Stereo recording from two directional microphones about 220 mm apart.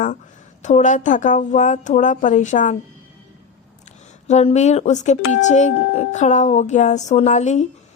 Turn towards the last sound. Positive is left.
turn(degrees=30)  # may be behind; listen again after turning